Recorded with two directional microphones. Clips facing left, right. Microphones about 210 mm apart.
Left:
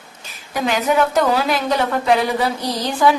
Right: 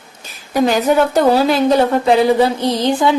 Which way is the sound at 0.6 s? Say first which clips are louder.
Right 3 dB; 35° right (ahead or behind).